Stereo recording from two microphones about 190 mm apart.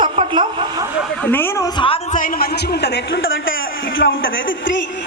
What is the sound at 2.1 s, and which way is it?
Speech, 45° left (ahead or behind).